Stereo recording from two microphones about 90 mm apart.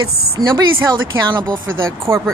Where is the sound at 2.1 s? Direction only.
30° right (ahead or behind).